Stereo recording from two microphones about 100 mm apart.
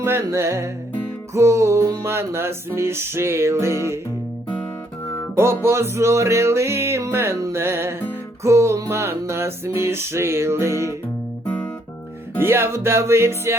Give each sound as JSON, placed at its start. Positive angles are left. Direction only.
{"t": 0.0, "sound": "music", "side_deg": -25}
{"t": 5.4, "sound": "music", "side_deg": -25}
{"t": 11.4, "sound": "music", "side_deg": 20}
{"t": 12.4, "sound": "music", "side_deg": -25}